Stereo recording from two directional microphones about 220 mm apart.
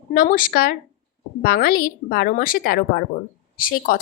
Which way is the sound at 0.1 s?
40° left (ahead or behind).